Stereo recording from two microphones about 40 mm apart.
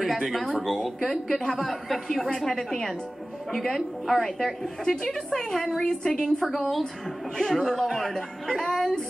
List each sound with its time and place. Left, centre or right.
0.0 s a woman's voice: centre
6.2 s a woman's voice: centre